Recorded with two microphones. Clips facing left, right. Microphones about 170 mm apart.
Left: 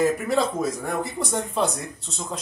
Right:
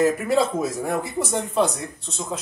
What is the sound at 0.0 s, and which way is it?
Speech, 5° right (ahead or behind).